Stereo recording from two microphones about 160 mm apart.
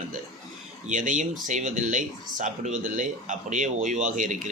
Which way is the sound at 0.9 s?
55° right (ahead or behind).